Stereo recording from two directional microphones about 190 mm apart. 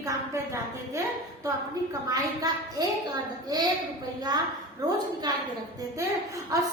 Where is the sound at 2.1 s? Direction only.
20° right (ahead or behind).